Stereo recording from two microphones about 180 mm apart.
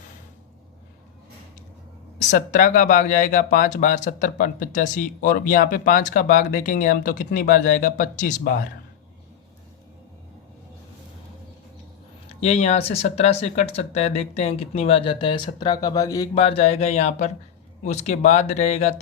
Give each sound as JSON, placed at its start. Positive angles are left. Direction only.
{"t": 2.1, "sound": "speech", "side_deg": 45}
{"t": 12.3, "sound": "speech", "side_deg": 35}
{"t": 16.3, "sound": "speech", "side_deg": 35}